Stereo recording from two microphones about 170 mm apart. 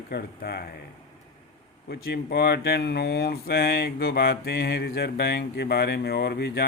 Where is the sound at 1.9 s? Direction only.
75° left (ahead or behind).